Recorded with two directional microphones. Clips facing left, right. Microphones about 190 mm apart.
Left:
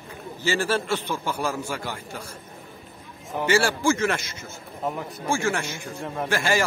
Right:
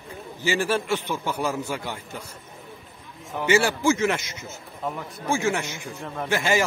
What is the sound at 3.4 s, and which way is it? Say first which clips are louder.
A man's voice: right 1 dB; 15° right (ahead or behind).